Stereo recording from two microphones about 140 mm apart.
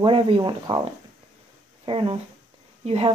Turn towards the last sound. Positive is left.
turn(degrees=-45)  # may be behind; listen again after turning